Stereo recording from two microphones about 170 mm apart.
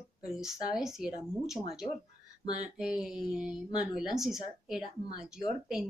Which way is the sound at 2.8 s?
5° right (ahead or behind).